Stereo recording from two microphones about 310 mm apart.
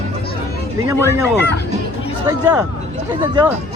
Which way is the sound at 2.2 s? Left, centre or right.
Centre.